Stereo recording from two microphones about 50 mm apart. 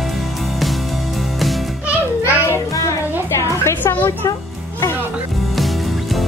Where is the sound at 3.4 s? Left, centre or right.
Left.